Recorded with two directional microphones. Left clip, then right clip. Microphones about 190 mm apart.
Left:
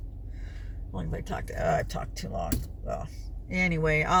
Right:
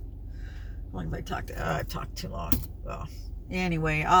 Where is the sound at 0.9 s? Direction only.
15° left (ahead or behind).